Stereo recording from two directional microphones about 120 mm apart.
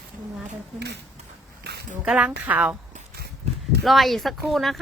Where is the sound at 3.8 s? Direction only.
Centre (ahead or behind).